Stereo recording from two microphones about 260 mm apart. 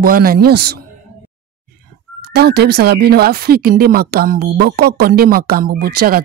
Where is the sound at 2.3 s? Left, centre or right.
Right.